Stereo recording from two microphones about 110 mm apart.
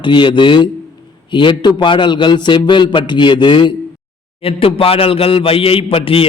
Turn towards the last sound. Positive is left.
turn(degrees=55)  # may be behind; listen again after turning